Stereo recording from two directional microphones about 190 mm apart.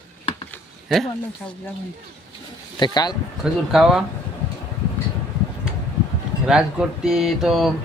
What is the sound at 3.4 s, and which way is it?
Speech, centre (ahead or behind).